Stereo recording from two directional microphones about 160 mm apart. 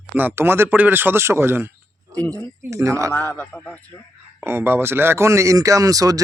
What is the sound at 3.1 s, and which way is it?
Speech, 10° left (ahead or behind).